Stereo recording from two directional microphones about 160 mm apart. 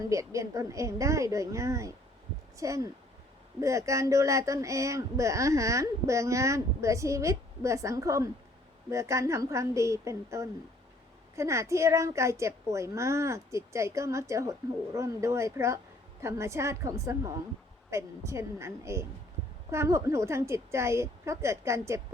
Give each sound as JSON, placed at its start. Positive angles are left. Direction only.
{"t": 0.1, "sound": "a woman's voice", "side_deg": -20}